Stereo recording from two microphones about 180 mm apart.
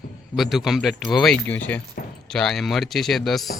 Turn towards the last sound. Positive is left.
turn(degrees=0)  # may be behind; listen again after turning